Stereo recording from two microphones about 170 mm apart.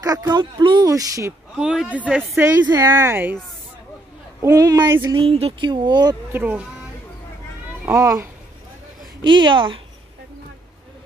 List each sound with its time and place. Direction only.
0.0 s speech: 20° right (ahead or behind)
1.6 s speech: 5° right (ahead or behind)
4.4 s speech: 20° right (ahead or behind)
6.3 s speech: 10° right (ahead or behind)
7.8 s speech: 20° right (ahead or behind)